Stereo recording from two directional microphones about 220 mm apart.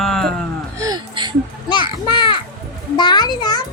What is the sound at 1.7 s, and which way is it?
Children playing, 20° left (ahead or behind).